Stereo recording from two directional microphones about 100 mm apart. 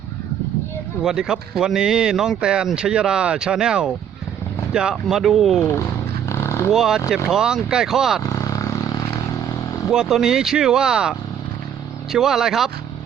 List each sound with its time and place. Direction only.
1.0 s speech: 5° right (ahead or behind)
5.5 s speech: 25° left (ahead or behind)
6.2 s vehicle: 25° left (ahead or behind)
6.7 s speech: 5° right (ahead or behind)
8.2 s vehicle: 35° left (ahead or behind)
9.9 s speech: 5° right (ahead or behind)
12.1 s speech: 5° right (ahead or behind)